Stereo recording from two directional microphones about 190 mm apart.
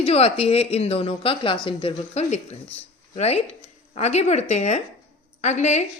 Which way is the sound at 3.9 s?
35° left (ahead or behind).